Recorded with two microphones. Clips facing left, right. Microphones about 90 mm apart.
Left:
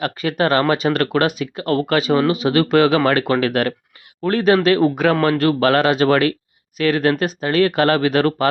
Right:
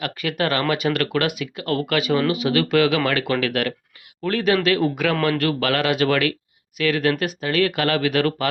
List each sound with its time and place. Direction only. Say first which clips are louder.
0.0 s speech: left 5 dB; 30° left (ahead or behind)